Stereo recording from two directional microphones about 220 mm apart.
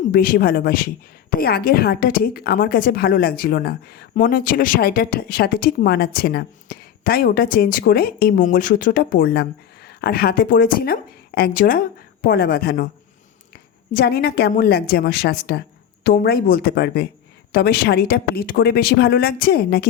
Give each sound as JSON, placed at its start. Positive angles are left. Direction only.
{"t": 0.1, "sound": "a woman's voice", "side_deg": 40}
{"t": 13.9, "sound": "a woman's voice", "side_deg": 45}